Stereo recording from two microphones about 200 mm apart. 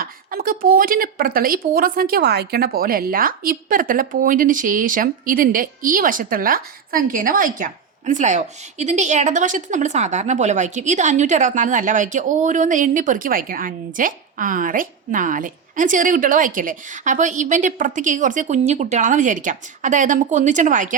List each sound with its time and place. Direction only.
0.0 s speech: 45° right (ahead or behind)